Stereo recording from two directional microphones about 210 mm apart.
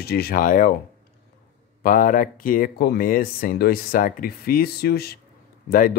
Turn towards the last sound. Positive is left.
turn(degrees=40)  # may be behind; listen again after turning